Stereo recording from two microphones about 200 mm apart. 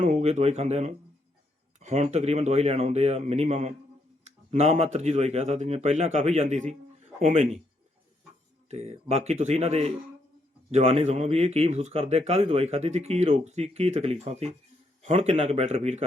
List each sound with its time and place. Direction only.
0.0 s speech: 35° right (ahead or behind)
8.7 s speech: 35° right (ahead or behind)